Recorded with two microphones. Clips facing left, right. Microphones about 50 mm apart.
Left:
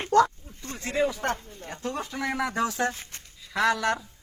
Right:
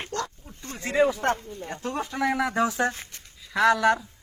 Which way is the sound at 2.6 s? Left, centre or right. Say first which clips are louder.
Right 2 dB; centre.